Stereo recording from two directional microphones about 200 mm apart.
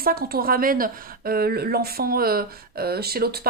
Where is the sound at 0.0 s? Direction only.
50° right (ahead or behind).